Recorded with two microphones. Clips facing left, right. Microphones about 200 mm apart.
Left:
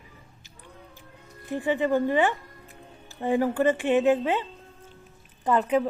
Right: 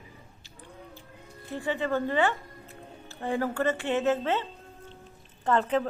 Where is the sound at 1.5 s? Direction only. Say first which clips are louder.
Left 5 dB; 15° left (ahead or behind).